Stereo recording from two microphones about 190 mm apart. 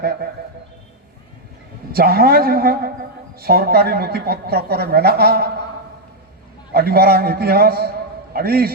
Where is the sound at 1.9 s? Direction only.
55° right (ahead or behind).